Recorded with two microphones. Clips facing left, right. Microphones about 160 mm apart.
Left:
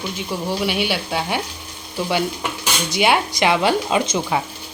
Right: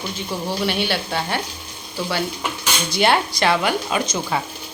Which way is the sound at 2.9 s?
15° left (ahead or behind).